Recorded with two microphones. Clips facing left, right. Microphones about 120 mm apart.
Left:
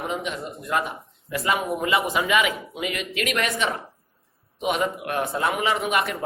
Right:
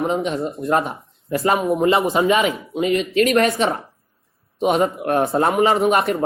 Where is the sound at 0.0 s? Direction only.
35° right (ahead or behind).